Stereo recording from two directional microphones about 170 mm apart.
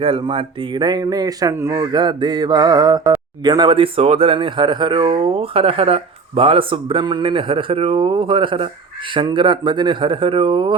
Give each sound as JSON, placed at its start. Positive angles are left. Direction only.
{"t": 0.0, "sound": "speech", "side_deg": -30}